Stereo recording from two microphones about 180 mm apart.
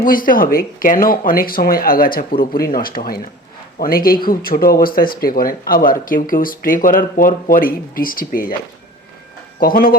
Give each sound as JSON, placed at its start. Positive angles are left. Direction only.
{"t": 0.0, "sound": "speech", "side_deg": 50}
{"t": 9.6, "sound": "speech", "side_deg": 55}